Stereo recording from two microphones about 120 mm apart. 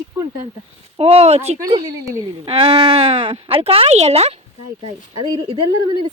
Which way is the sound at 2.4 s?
55° right (ahead or behind).